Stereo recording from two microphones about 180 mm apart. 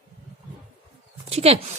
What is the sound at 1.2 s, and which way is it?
Speech, 35° right (ahead or behind).